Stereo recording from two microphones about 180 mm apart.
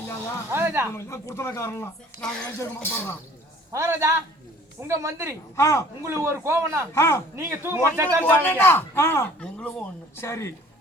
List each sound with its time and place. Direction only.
0.5 s a man's voice: 15° right (ahead or behind)
0.9 s speech: 15° left (ahead or behind)
3.7 s a man's voice: 15° right (ahead or behind)
5.5 s speech: 15° left (ahead or behind)
6.0 s a man's voice: 15° right (ahead or behind)
6.9 s speech: 15° left (ahead or behind)
7.3 s a man's voice: 10° right (ahead or behind)
8.2 s speech: 10° left (ahead or behind)